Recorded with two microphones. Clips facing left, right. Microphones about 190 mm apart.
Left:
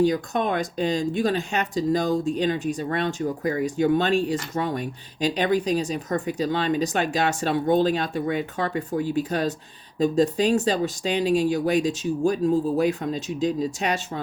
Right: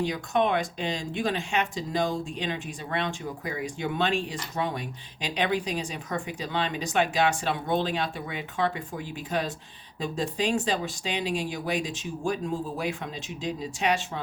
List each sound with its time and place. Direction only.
0.0 s speech: 40° left (ahead or behind)